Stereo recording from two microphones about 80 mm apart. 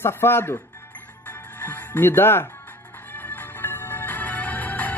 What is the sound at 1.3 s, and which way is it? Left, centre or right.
Music, left.